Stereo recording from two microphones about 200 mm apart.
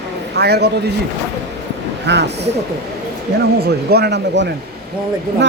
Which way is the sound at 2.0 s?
60° right (ahead or behind).